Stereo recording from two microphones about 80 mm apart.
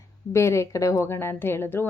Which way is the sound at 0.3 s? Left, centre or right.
Left.